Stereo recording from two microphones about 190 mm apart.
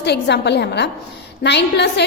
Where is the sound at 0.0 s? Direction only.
65° left (ahead or behind).